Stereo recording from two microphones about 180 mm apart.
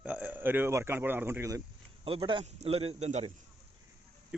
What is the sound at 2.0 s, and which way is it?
A man's voice, 30° right (ahead or behind).